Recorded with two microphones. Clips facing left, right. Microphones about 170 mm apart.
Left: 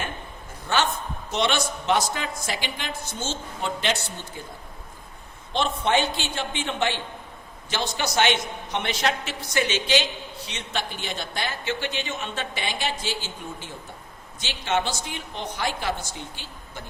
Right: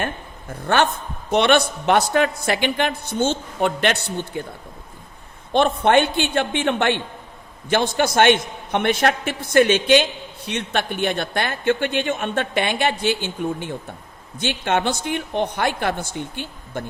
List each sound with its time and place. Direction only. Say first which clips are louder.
0.7 s a man's voice: right 5 dB; 55° right (ahead or behind)
5.8 s a man's voice: right 7 dB; 60° right (ahead or behind)